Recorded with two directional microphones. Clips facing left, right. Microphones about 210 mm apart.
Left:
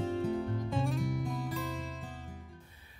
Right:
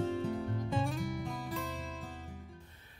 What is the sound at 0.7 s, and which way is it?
Music, centre (ahead or behind).